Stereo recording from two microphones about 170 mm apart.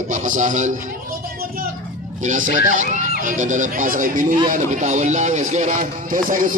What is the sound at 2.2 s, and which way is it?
Speech, 50° right (ahead or behind).